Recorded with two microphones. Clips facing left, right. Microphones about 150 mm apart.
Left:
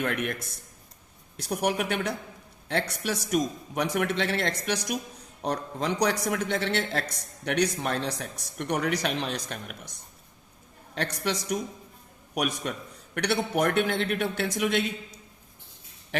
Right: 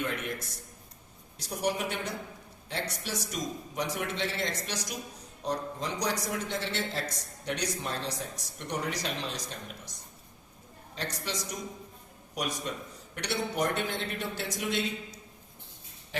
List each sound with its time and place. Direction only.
0.0 s speech: 65° left (ahead or behind)
10.9 s speech: 65° left (ahead or behind)